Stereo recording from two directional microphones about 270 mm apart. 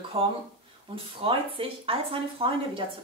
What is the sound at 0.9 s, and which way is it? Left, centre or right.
Speech, centre.